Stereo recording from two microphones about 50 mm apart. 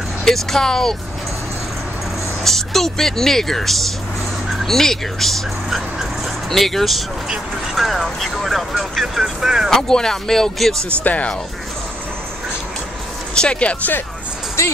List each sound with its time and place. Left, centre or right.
0.2 s speech: centre
2.4 s speech: centre
9.7 s speech: centre
11.1 s speech: left
13.3 s speech: centre